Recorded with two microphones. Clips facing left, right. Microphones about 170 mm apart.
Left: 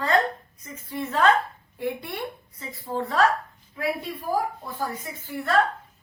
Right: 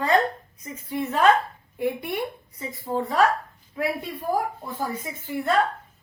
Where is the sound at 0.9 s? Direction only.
20° right (ahead or behind).